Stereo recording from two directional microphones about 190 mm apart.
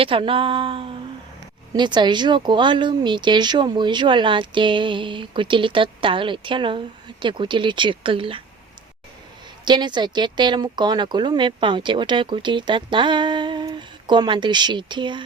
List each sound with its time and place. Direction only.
0.0 s speech: 30° right (ahead or behind)
9.6 s speech: 25° right (ahead or behind)